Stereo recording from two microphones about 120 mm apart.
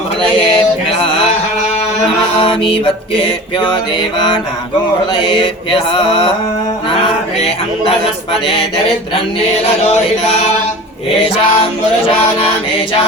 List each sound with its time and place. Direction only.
2.4 s music: 45° left (ahead or behind)
5.1 s music: 45° left (ahead or behind)
11.5 s music: 50° left (ahead or behind)